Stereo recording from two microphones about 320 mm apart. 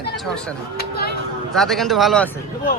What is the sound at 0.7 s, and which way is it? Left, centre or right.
Speech, left.